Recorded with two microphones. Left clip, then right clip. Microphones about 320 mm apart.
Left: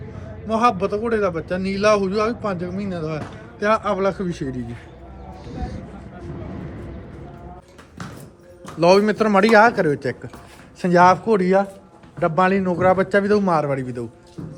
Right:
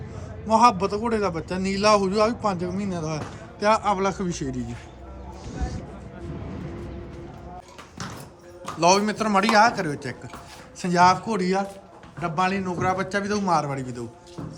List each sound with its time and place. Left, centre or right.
0.4 s a man's voice: centre
5.5 s a sound: centre
8.6 s a man's voice: centre